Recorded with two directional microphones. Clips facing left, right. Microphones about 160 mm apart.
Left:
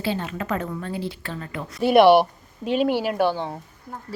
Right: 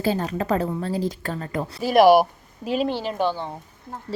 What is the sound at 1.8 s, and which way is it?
A woman's voice, centre (ahead or behind).